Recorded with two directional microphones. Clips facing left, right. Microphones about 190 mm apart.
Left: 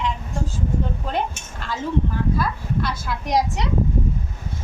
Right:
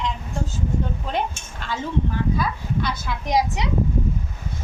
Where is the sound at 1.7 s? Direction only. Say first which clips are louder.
Left 1 dB; 5° left (ahead or behind).